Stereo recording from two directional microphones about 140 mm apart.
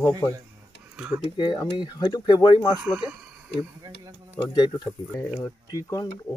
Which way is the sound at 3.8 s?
25° right (ahead or behind).